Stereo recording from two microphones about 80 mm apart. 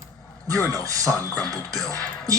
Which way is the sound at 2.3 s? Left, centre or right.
Right.